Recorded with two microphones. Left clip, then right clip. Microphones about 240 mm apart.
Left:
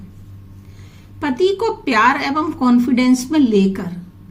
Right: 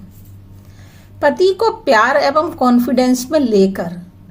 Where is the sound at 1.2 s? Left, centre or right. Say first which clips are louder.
Right 4 dB; centre.